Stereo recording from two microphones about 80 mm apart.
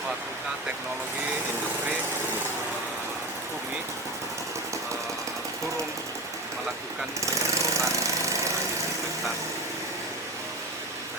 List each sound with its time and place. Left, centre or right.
7.7 s lawn mower: right